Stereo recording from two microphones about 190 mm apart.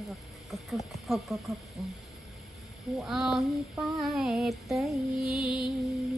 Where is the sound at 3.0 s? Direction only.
Centre (ahead or behind).